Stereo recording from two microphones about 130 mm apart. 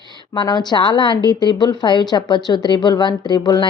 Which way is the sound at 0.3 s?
35° left (ahead or behind).